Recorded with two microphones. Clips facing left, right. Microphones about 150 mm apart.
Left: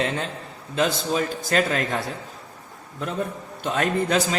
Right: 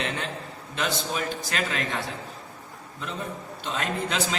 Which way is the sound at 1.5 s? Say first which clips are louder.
Left 7 dB; 40° left (ahead or behind).